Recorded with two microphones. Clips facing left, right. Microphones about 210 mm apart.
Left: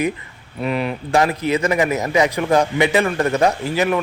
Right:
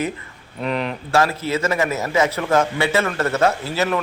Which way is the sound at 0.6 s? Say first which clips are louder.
Left 2 dB; 10° left (ahead or behind).